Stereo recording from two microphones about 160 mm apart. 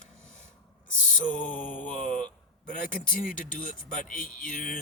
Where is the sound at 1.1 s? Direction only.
55° left (ahead or behind).